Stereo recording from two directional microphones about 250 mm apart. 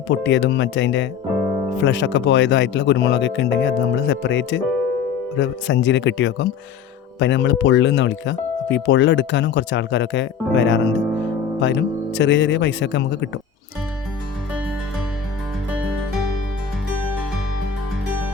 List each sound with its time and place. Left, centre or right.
0.1 s speech: left